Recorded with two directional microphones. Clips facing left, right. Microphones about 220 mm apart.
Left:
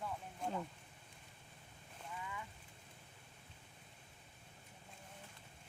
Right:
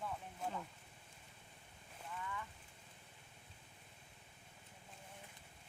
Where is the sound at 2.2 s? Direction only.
15° left (ahead or behind).